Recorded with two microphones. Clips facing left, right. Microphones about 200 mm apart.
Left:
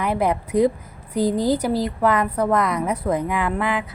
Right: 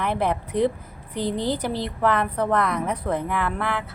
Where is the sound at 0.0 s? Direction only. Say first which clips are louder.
Left 3 dB; 10° left (ahead or behind).